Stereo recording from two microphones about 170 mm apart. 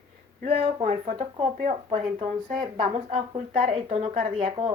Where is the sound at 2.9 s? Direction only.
35° right (ahead or behind).